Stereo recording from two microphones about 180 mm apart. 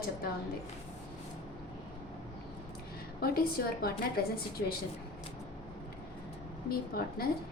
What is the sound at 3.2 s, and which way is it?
A woman's voice, 55° left (ahead or behind).